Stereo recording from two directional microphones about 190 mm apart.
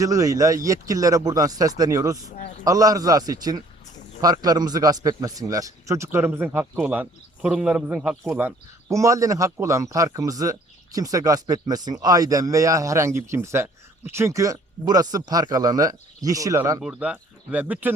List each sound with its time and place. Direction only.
0.0 s a man's voice: 15° right (ahead or behind)
16.8 s speech: 5° right (ahead or behind)